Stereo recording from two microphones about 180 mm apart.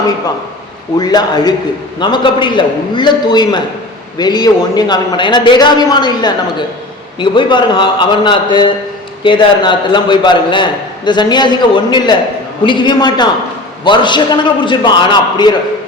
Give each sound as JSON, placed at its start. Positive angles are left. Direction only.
{"t": 0.9, "sound": "a man's voice", "side_deg": 20}